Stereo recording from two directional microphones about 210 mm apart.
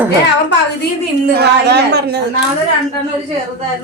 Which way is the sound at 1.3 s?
50° right (ahead or behind).